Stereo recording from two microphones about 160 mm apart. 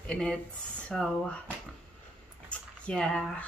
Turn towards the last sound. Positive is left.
turn(degrees=5)  # may be behind; listen again after turning